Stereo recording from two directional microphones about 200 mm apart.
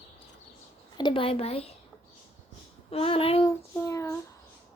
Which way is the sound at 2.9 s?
30° left (ahead or behind).